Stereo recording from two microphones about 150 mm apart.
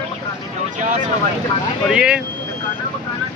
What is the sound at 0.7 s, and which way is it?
Speech, 55° right (ahead or behind).